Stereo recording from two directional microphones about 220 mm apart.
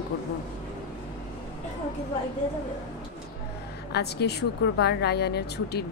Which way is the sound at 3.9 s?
50° left (ahead or behind).